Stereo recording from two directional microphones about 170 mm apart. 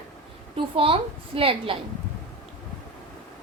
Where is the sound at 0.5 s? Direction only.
30° right (ahead or behind).